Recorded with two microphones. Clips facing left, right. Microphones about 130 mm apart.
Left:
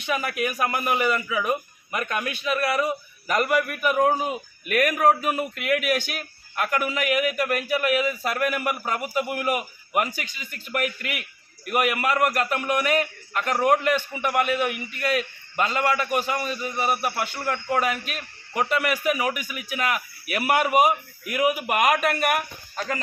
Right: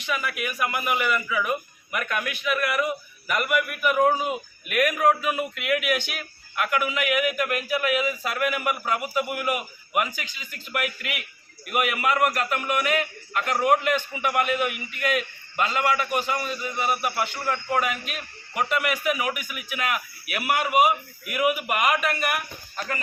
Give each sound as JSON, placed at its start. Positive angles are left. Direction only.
{"t": 0.0, "sound": "a man's voice", "side_deg": 40}
{"t": 15.0, "sound": "a man's voice", "side_deg": 35}